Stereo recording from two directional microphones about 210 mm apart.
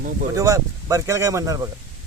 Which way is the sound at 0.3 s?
15° right (ahead or behind).